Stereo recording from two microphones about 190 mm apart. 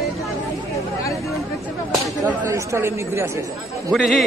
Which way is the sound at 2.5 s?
15° right (ahead or behind).